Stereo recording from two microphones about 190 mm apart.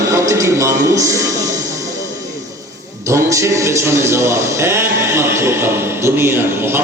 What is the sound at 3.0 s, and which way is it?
A man's voice, 15° right (ahead or behind).